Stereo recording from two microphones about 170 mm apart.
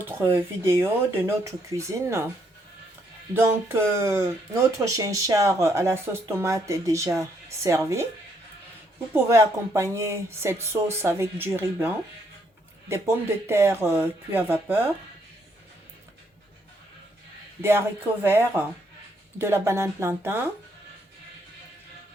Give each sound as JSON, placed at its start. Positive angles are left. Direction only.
{"t": 0.0, "sound": "speech", "side_deg": -15}
{"t": 3.3, "sound": "speech", "side_deg": -15}
{"t": 9.1, "sound": "speech", "side_deg": -15}
{"t": 13.5, "sound": "speech", "side_deg": -15}
{"t": 17.6, "sound": "speech", "side_deg": -15}